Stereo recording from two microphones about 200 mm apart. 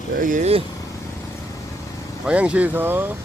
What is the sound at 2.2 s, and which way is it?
Speech, 5° right (ahead or behind).